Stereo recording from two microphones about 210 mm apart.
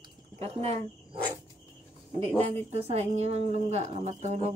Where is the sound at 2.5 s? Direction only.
30° right (ahead or behind).